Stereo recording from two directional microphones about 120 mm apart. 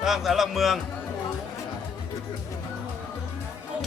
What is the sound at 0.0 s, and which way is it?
Speech, 5° right (ahead or behind).